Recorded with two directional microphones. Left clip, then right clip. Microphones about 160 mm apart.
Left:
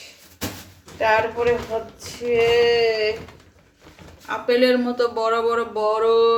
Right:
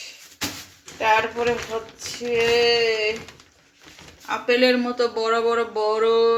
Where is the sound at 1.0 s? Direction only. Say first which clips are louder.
Left 1 dB; 30° right (ahead or behind).